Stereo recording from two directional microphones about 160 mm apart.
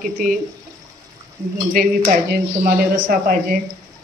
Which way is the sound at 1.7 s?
70° right (ahead or behind).